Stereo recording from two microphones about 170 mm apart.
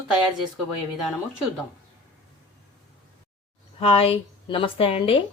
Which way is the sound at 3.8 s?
35° left (ahead or behind).